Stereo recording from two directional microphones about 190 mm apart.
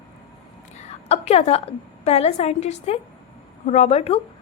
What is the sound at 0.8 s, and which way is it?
A woman's voice, 35° left (ahead or behind).